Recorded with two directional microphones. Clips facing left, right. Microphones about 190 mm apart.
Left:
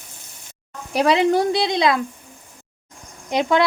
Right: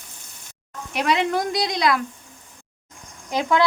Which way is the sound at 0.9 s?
30° left (ahead or behind).